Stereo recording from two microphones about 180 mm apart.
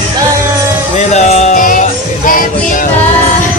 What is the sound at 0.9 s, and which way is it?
Music, 40° left (ahead or behind).